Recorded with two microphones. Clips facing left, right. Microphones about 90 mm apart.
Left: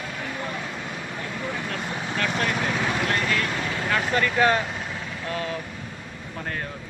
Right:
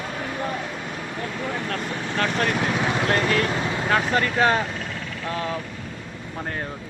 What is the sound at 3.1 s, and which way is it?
Speech, 30° right (ahead or behind).